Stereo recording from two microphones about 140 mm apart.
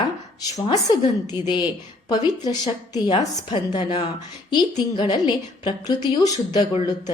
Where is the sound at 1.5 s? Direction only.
35° left (ahead or behind).